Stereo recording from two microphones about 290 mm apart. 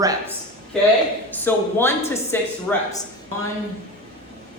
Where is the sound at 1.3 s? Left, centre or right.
Centre.